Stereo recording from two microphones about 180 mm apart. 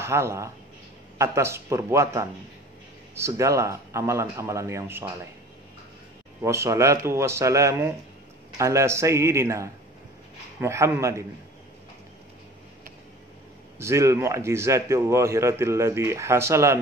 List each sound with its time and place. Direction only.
0.0 s a man's voice: 15° right (ahead or behind)
6.4 s a man's voice: 15° right (ahead or behind)
13.7 s a man's voice: 15° right (ahead or behind)